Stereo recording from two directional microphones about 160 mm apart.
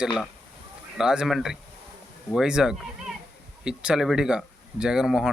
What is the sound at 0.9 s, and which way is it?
Speech, 5° right (ahead or behind).